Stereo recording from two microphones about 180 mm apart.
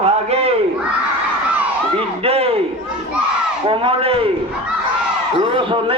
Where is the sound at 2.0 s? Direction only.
35° right (ahead or behind).